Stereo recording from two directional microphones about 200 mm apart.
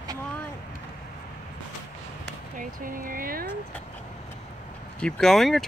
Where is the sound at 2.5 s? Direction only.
45° right (ahead or behind).